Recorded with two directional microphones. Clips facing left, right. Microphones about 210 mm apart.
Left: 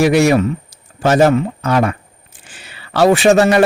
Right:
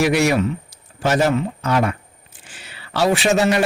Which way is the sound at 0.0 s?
45° left (ahead or behind).